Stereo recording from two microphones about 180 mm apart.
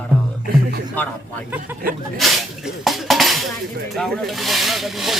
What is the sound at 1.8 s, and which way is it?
Sneeze, 55° right (ahead or behind).